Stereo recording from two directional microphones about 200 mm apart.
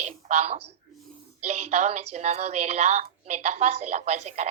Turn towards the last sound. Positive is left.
turn(degrees=-35)  # may be behind; listen again after turning